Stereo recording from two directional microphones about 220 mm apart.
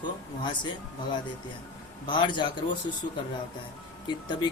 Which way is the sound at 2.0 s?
20° left (ahead or behind).